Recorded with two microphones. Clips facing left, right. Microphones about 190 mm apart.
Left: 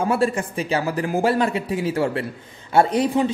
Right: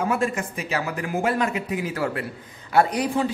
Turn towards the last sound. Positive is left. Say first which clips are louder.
# left 3 dB
turn(degrees=25)  # may be behind; listen again after turning